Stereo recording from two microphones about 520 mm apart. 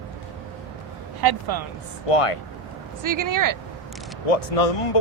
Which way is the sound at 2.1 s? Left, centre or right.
Left.